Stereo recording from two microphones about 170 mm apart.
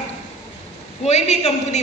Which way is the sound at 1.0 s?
40° left (ahead or behind).